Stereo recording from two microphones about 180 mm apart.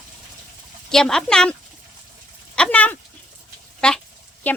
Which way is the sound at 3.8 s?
5° left (ahead or behind).